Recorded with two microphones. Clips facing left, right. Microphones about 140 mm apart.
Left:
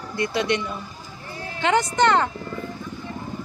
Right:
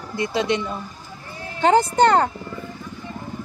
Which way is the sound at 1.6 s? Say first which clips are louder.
Right 4 dB; 35° right (ahead or behind).